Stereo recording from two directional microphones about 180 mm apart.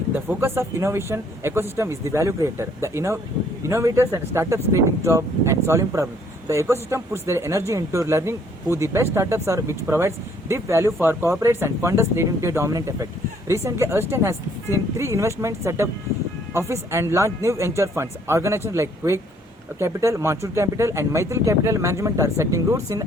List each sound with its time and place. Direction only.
0.1 s speech: 10° right (ahead or behind)